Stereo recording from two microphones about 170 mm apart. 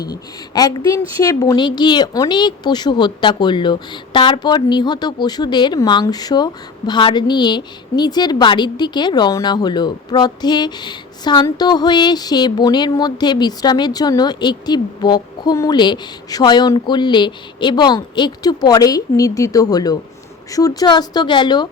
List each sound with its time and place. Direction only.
0.1 s speech: 20° left (ahead or behind)